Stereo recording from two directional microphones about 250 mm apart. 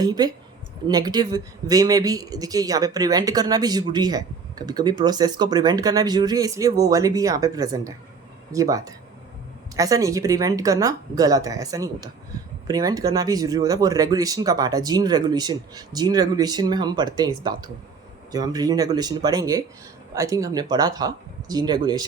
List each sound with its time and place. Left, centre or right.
0.0 s speech: centre